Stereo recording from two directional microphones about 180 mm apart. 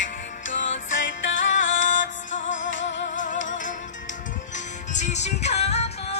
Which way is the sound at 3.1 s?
45° left (ahead or behind).